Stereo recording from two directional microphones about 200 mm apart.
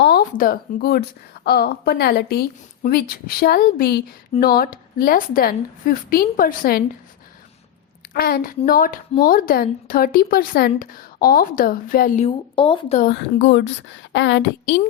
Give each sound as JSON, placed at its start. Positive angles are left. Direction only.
{"t": 0.0, "sound": "a woman's voice", "side_deg": 50}
{"t": 8.1, "sound": "a woman's voice", "side_deg": 50}
{"t": 12.5, "sound": "speech", "side_deg": 25}
{"t": 13.0, "sound": "a woman's voice", "side_deg": 50}